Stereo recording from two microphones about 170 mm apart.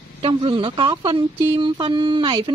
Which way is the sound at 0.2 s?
30° right (ahead or behind).